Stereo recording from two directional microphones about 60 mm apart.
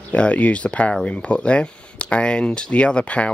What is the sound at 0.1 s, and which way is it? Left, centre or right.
Speech, left.